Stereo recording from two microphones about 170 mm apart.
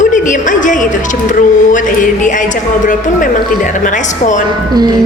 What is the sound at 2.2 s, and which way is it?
Speech, 50° left (ahead or behind).